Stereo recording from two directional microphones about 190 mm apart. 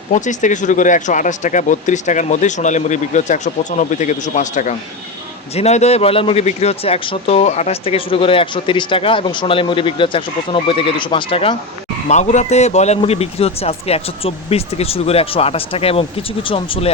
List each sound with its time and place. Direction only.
0.1 s a man's voice: 40° left (ahead or behind)